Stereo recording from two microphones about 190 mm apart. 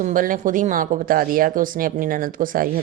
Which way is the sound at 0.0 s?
45° right (ahead or behind).